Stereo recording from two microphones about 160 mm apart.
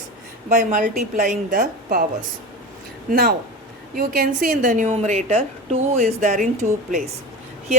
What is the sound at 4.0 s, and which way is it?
A woman's voice, 60° right (ahead or behind).